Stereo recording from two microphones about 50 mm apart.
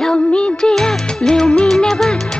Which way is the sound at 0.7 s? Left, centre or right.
Centre.